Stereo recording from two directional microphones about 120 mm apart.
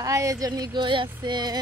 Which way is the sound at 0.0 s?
25° right (ahead or behind).